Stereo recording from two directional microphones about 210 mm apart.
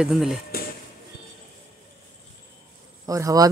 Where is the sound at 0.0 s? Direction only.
Centre (ahead or behind).